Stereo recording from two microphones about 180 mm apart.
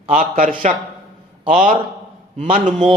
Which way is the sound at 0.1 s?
45° right (ahead or behind).